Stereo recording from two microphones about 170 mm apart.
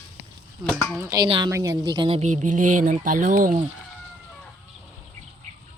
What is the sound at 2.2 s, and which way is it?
Speech, 45° right (ahead or behind).